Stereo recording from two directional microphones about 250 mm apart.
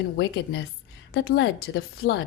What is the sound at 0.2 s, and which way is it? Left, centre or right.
A woman's voice, left.